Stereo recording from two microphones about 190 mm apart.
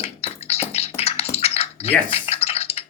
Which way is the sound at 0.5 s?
35° left (ahead or behind).